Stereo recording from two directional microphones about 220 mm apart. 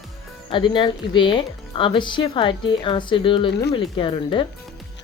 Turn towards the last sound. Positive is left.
turn(degrees=25)  # may be behind; listen again after turning